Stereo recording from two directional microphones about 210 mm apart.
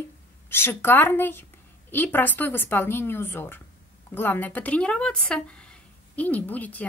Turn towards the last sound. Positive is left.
turn(degrees=5)  # may be behind; listen again after turning